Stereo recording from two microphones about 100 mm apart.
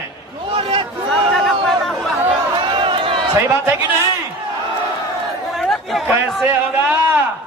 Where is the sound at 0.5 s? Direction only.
65° right (ahead or behind).